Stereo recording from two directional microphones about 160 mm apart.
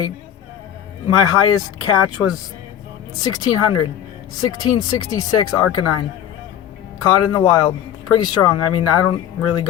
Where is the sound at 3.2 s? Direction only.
25° left (ahead or behind).